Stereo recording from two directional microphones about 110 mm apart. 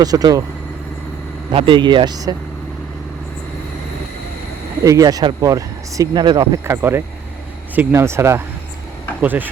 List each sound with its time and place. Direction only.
0.0 s speech: 35° right (ahead or behind)
1.5 s speech: 50° right (ahead or behind)
4.8 s speech: 30° right (ahead or behind)
6.2 s speech: 40° right (ahead or behind)
6.7 s speech: 20° right (ahead or behind)